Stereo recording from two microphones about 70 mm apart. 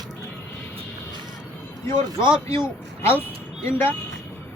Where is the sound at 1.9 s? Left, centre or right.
Left.